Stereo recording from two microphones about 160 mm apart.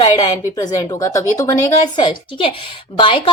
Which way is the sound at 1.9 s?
30° left (ahead or behind).